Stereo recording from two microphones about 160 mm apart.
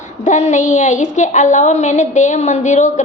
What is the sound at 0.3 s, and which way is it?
A woman's voice, 50° left (ahead or behind).